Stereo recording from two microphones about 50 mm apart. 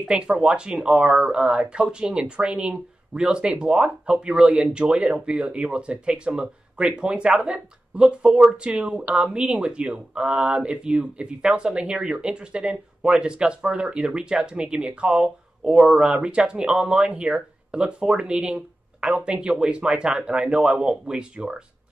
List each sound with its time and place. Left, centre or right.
0.1 s speech: centre
15.2 s speech: centre
16.1 s speech: centre